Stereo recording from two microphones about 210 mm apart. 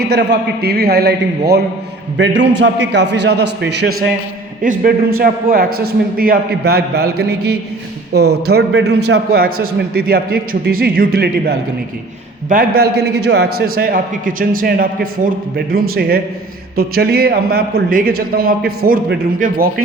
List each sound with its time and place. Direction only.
0.0 s a man's voice: 55° right (ahead or behind)
4.6 s a man's voice: 40° right (ahead or behind)